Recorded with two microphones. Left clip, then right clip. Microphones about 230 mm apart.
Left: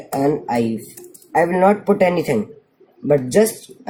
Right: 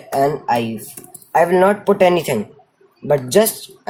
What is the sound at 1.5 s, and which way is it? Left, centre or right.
Speech, right.